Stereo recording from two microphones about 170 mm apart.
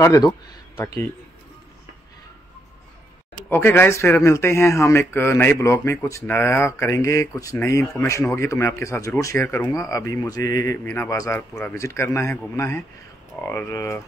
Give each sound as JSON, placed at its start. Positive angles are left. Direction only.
{"t": 0.0, "sound": "speech", "side_deg": 20}
{"t": 3.4, "sound": "speech", "side_deg": 10}